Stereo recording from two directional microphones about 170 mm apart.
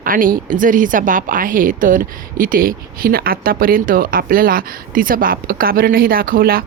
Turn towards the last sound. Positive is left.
turn(degrees=-60)  # may be behind; listen again after turning